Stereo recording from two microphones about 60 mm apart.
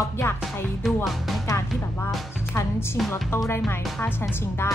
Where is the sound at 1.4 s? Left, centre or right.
Left.